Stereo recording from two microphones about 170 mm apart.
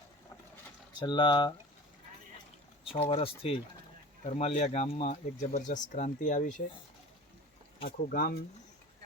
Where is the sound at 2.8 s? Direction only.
30° left (ahead or behind); by 6.6 s 50° left (ahead or behind).